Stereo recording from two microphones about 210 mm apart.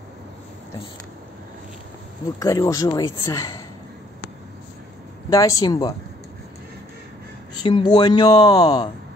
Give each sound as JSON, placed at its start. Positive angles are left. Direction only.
{"t": 2.4, "sound": "speech", "side_deg": 15}
{"t": 5.3, "sound": "speech", "side_deg": 15}
{"t": 7.5, "sound": "speech", "side_deg": 20}